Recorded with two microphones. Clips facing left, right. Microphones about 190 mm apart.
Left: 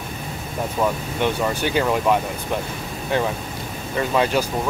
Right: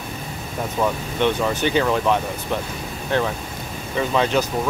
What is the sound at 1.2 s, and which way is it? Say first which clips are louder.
Speech: right 2 dB; 10° left (ahead or behind).